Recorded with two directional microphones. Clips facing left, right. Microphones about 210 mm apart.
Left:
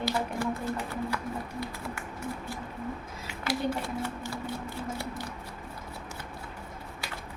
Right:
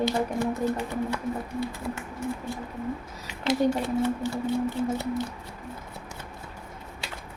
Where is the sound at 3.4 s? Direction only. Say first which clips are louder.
Right 7 dB; 20° right (ahead or behind).